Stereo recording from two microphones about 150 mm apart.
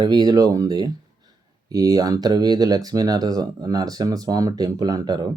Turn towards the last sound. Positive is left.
turn(degrees=-25)  # may be behind; listen again after turning